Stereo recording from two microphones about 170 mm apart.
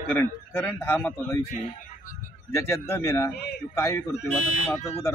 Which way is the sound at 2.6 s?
15° left (ahead or behind).